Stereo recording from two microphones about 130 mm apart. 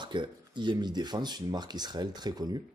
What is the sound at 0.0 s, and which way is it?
Speech, 35° right (ahead or behind).